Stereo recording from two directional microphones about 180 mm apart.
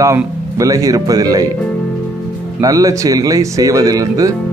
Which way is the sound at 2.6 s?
20° right (ahead or behind).